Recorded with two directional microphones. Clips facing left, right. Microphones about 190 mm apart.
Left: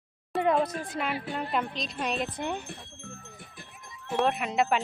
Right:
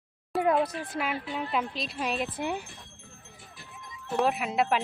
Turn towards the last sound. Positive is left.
turn(degrees=-5)  # may be behind; listen again after turning